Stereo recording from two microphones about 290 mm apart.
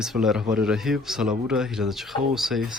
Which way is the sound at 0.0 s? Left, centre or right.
Centre.